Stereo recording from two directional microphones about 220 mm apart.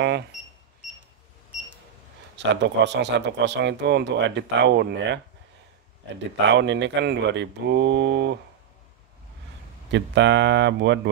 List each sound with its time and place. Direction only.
2.3 s a man's voice: 55° right (ahead or behind)
6.5 s a man's voice: 55° right (ahead or behind)
9.8 s a man's voice: 55° right (ahead or behind)